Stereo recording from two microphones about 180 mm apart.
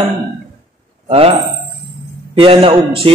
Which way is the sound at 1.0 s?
35° right (ahead or behind).